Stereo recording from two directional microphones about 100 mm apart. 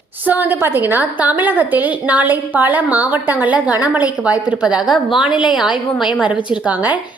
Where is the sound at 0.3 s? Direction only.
15° right (ahead or behind).